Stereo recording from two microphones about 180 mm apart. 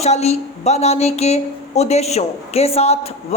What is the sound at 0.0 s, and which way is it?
A woman's voice, 35° left (ahead or behind).